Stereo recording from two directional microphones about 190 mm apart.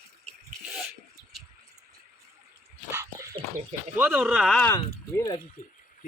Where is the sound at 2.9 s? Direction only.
15° right (ahead or behind).